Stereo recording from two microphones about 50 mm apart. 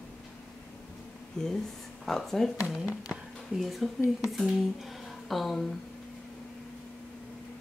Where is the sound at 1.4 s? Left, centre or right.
Centre.